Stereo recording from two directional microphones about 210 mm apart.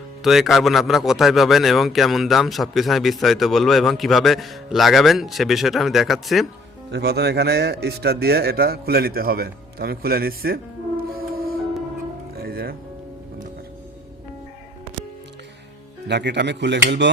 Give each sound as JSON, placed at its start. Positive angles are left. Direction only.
{"t": 0.2, "sound": "a man's voice", "side_deg": 0}
{"t": 6.9, "sound": "speech", "side_deg": -50}
{"t": 12.4, "sound": "music", "side_deg": -45}
{"t": 16.0, "sound": "speech", "side_deg": -55}